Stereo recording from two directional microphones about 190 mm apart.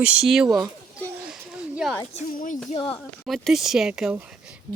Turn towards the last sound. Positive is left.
turn(degrees=-5)  # may be behind; listen again after turning